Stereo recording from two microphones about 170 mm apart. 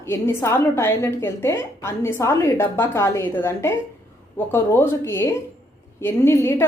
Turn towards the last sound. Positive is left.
turn(degrees=15)  # may be behind; listen again after turning